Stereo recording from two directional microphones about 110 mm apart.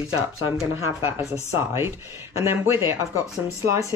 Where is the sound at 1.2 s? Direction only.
25° right (ahead or behind).